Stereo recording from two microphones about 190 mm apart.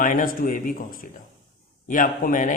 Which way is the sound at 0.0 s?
45° left (ahead or behind).